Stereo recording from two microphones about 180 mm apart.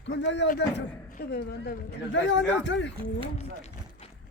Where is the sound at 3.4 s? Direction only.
40° left (ahead or behind).